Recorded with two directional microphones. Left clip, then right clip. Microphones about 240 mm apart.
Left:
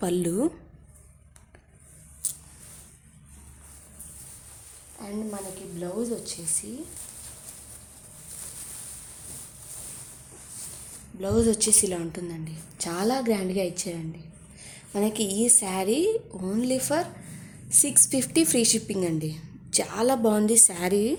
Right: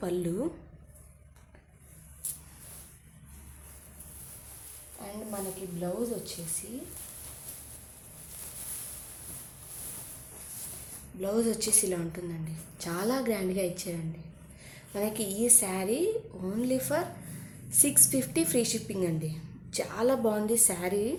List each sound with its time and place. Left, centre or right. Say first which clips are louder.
0.0 s a woman's voice: left 6 dB; left
5.8 s a woman's voice: left 3 dB; left
11.2 s a woman's voice: left 5 dB; left